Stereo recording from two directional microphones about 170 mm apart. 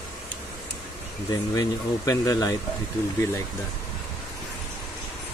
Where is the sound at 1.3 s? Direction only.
20° left (ahead or behind).